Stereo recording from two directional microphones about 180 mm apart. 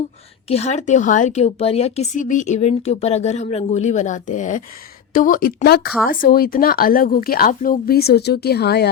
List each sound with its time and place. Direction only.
0.4 s a woman's voice: 35° left (ahead or behind); by 8.9 s 65° left (ahead or behind)